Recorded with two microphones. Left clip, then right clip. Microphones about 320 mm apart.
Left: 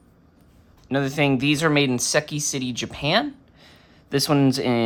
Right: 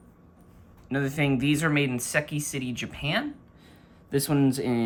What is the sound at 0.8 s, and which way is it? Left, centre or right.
Speech, centre.